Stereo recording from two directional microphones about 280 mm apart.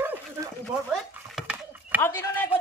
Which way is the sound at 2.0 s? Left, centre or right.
Centre.